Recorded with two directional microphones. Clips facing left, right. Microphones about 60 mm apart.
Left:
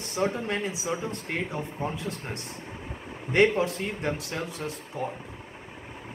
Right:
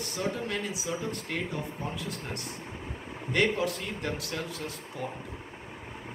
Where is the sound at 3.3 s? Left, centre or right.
Left.